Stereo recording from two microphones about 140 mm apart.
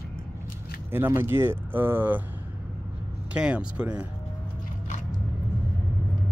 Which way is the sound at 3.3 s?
10° right (ahead or behind).